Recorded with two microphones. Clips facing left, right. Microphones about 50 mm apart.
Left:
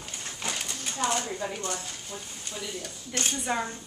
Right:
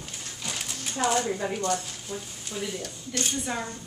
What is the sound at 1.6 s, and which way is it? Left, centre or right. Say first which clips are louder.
Speech: right 6 dB; centre.